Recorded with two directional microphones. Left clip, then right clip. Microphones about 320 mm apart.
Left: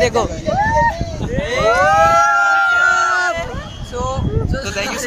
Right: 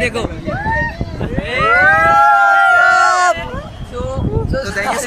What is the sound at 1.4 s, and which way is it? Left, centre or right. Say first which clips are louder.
Speech: right 2 dB; centre.